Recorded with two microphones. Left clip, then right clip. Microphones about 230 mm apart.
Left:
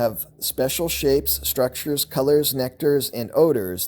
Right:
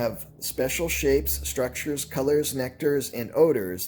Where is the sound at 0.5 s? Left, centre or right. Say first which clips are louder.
Left 3 dB; left.